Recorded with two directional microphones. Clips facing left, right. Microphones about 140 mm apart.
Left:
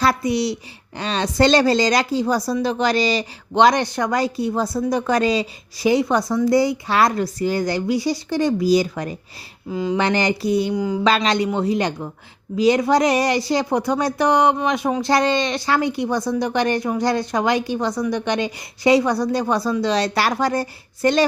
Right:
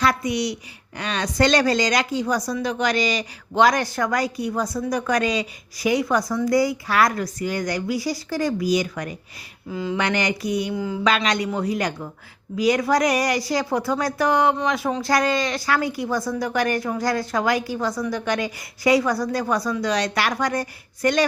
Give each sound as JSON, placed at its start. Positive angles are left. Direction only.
{"t": 0.0, "sound": "a woman's voice", "side_deg": 30}
{"t": 9.6, "sound": "a woman's voice", "side_deg": 20}
{"t": 10.0, "sound": "a woman's voice", "side_deg": 30}